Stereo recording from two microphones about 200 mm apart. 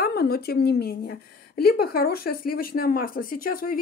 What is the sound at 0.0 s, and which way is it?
A woman's voice, 50° left (ahead or behind).